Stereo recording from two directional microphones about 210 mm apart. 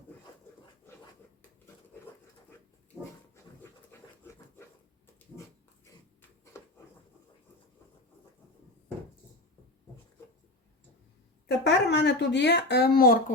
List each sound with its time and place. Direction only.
3.9 s pant: 10° left (ahead or behind)
6.5 s a sound: 15° left (ahead or behind)
11.4 s speech: 55° left (ahead or behind)